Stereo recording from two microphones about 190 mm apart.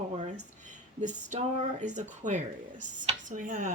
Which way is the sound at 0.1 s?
40° right (ahead or behind).